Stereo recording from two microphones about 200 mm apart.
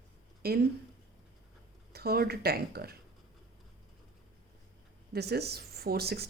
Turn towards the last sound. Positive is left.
turn(degrees=-55)  # may be behind; listen again after turning